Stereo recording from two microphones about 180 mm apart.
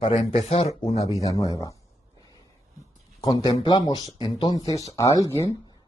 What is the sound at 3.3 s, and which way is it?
Speech, 30° left (ahead or behind).